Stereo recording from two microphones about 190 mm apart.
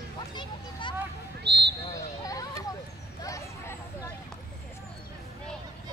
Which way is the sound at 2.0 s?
20° left (ahead or behind).